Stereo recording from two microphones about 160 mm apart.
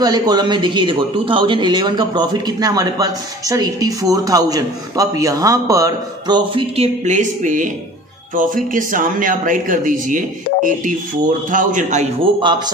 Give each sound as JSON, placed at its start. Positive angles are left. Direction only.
{"t": 0.0, "sound": "a man's voice", "side_deg": -25}
{"t": 6.8, "sound": "speech", "side_deg": -50}
{"t": 12.4, "sound": "a man's voice", "side_deg": -30}